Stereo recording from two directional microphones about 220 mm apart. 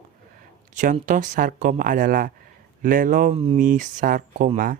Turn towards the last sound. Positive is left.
turn(degrees=-35)  # may be behind; listen again after turning